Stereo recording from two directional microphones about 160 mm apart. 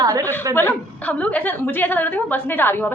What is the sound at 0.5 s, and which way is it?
A woman's voice, 10° left (ahead or behind).